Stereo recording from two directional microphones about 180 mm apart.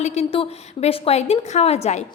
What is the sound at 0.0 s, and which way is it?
A woman's voice, 35° left (ahead or behind).